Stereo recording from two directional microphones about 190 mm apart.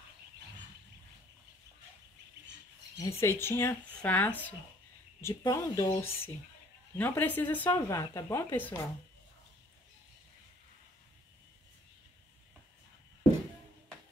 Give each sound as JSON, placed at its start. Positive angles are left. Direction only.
{"t": 3.0, "sound": "speech", "side_deg": 15}